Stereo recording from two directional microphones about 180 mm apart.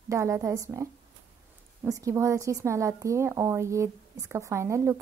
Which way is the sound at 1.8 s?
15° right (ahead or behind).